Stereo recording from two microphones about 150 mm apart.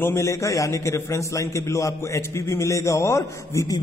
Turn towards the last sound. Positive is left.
turn(degrees=20)  # may be behind; listen again after turning